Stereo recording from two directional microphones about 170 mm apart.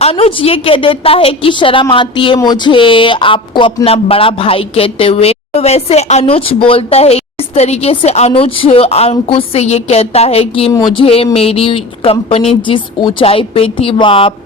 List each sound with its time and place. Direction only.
0.0 s a woman's voice: 35° left (ahead or behind)
10.7 s a woman's voice: 20° left (ahead or behind)